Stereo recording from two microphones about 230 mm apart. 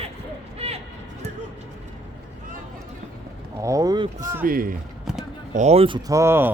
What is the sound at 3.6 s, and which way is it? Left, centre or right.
Speech, centre.